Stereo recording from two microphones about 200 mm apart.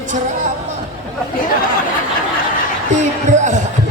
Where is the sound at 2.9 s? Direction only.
40° right (ahead or behind).